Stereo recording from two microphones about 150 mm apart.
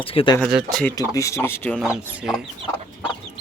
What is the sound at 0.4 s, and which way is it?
Speech, 5° right (ahead or behind).